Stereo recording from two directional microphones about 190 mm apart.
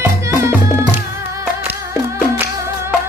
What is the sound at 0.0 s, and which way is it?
Music, 15° right (ahead or behind).